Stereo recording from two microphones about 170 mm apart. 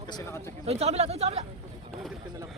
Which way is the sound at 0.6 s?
40° right (ahead or behind).